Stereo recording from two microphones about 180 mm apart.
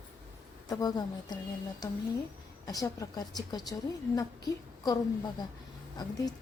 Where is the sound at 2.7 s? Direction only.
20° left (ahead or behind).